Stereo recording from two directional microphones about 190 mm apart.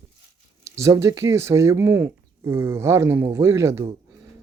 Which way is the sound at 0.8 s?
15° right (ahead or behind).